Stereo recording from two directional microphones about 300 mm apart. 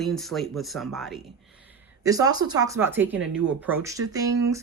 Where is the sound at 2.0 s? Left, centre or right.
Centre.